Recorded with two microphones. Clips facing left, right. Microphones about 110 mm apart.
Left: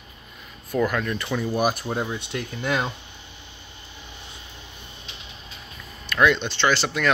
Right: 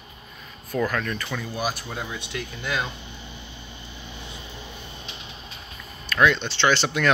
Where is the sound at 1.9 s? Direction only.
30° left (ahead or behind).